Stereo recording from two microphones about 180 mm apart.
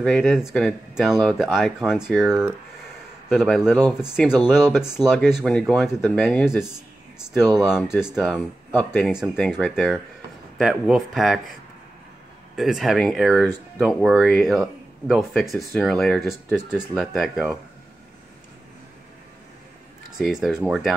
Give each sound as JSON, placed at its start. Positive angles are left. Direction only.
{"t": 0.0, "sound": "speech", "side_deg": 0}
{"t": 7.4, "sound": "speech", "side_deg": -20}
{"t": 7.7, "sound": "speech", "side_deg": -5}
{"t": 8.7, "sound": "speech", "side_deg": 10}
{"t": 9.1, "sound": "speech", "side_deg": -5}
{"t": 12.5, "sound": "speech", "side_deg": 0}
{"t": 20.2, "sound": "speech", "side_deg": -5}